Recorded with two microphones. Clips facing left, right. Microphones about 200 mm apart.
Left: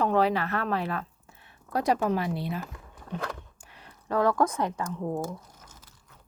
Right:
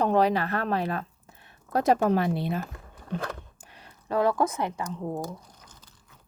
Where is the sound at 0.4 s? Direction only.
40° right (ahead or behind).